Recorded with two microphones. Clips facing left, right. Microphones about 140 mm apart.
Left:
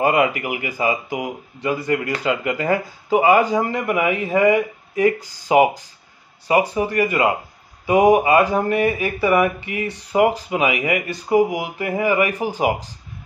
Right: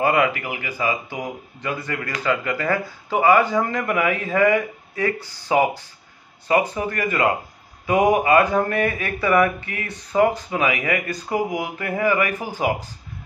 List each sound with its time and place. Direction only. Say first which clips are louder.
0.0 s speech: left 2 dB; 15° left (ahead or behind)